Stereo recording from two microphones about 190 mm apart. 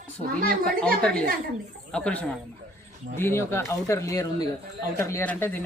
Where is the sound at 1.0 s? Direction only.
5° left (ahead or behind).